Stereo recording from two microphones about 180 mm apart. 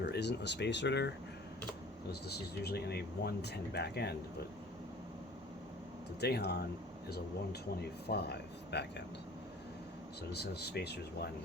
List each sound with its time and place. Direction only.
0.0 s speech: 65° left (ahead or behind)
2.0 s speech: 65° left (ahead or behind)
6.1 s speech: 65° left (ahead or behind)
7.8 s speech: 65° left (ahead or behind)
10.3 s speech: 65° left (ahead or behind)